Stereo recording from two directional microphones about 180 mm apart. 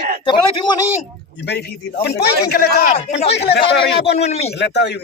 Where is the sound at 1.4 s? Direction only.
65° left (ahead or behind).